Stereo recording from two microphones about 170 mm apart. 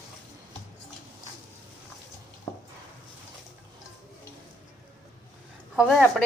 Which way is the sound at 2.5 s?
15° left (ahead or behind).